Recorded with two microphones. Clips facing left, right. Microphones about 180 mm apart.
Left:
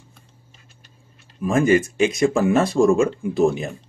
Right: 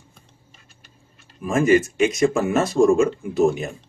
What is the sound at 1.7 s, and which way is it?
A man's voice, 30° left (ahead or behind).